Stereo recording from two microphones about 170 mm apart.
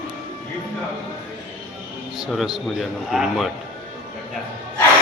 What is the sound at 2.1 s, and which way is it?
A man's voice, centre (ahead or behind).